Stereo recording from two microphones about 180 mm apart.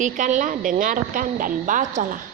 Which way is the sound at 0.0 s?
45° right (ahead or behind).